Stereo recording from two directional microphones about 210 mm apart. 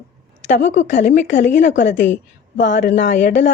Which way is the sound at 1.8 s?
60° left (ahead or behind).